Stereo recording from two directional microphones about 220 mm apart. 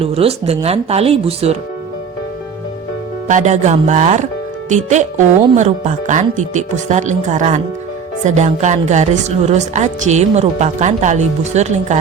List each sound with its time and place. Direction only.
0.0 s speech: 25° right (ahead or behind)
3.2 s a woman's voice: 35° right (ahead or behind)